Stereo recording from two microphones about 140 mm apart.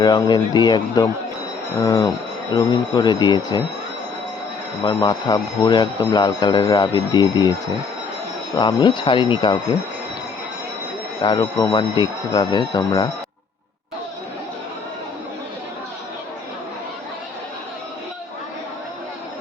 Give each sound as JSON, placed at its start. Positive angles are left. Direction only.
{"t": 0.0, "sound": "speech", "side_deg": 30}
{"t": 4.9, "sound": "speech", "side_deg": 30}
{"t": 8.5, "sound": "speech", "side_deg": 35}
{"t": 11.2, "sound": "speech", "side_deg": 25}